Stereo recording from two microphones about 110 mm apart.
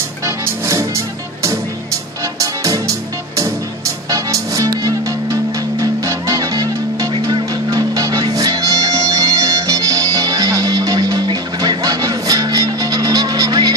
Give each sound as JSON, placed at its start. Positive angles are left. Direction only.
{"t": 0.2, "sound": "music", "side_deg": -25}